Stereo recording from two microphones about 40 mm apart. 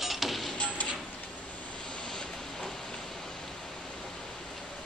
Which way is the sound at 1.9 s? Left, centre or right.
Left.